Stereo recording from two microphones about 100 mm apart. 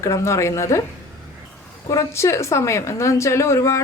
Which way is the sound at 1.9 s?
30° left (ahead or behind).